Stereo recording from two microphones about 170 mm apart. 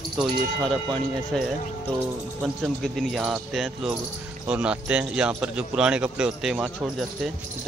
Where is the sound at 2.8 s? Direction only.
Centre (ahead or behind).